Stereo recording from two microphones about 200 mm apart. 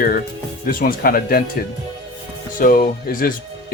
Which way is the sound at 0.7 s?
45° left (ahead or behind).